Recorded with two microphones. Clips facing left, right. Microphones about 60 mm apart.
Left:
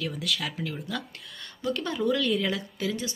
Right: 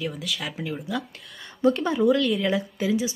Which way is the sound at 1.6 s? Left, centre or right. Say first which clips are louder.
Right 9 dB; right.